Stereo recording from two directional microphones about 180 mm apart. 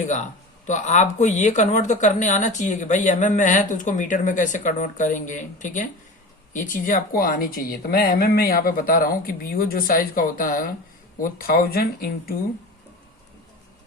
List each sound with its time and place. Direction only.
0.7 s speech: 40° left (ahead or behind); by 12.3 s 55° left (ahead or behind)